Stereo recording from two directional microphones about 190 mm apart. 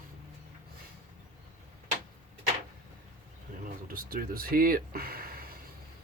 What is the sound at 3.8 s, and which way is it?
Speech, 50° right (ahead or behind).